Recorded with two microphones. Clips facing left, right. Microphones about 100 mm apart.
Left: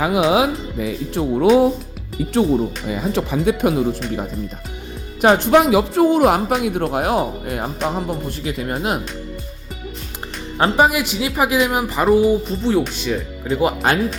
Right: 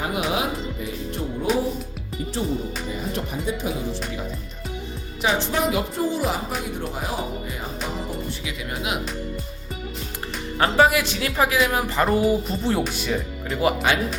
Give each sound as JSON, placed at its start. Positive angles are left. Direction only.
{"t": 0.0, "sound": "speech", "side_deg": 90}
{"t": 8.4, "sound": "speech", "side_deg": 40}
{"t": 10.6, "sound": "speech", "side_deg": 20}
{"t": 12.1, "sound": "speech", "side_deg": 0}
{"t": 13.5, "sound": "speech", "side_deg": 25}